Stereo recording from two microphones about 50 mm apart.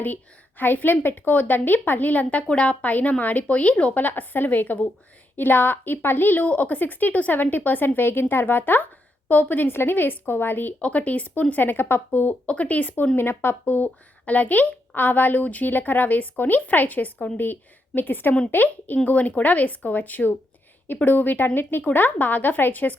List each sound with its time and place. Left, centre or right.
0.0 s a woman's voice: left
6.4 s a woman's voice: left
10.8 s a woman's voice: left
12.5 s speech: left
13.1 s a woman's voice: left